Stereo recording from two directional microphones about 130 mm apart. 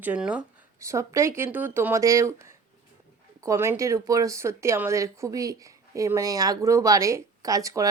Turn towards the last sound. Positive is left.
turn(degrees=-25)  # may be behind; listen again after turning